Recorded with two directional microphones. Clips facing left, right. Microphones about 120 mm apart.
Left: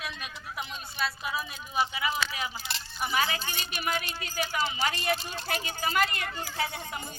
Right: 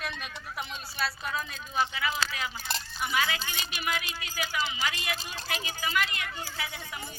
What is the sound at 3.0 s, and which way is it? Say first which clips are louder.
Speech: left 2 dB; 35° left (ahead or behind).